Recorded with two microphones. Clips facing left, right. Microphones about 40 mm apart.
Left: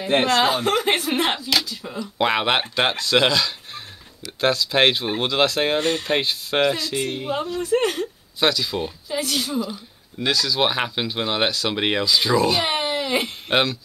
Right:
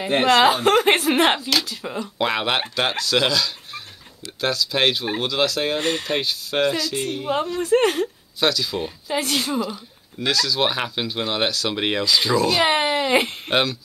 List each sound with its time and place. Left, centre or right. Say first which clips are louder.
0.2 s speech: right 8 dB; right
2.1 s speech: left 3 dB; centre
2.7 s speech: left 2 dB; left
5.8 s speech: left 1 dB; right
6.0 s speech: left 2 dB; left
7.2 s speech: right 5 dB; right
8.4 s speech: even; centre
9.1 s speech: right 2 dB; right
10.1 s speech: even; centre
12.7 s a sound: right 4 dB; right
13.5 s speech: left 2 dB; centre